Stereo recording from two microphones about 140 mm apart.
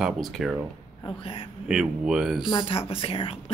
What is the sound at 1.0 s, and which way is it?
Speech, 40° left (ahead or behind).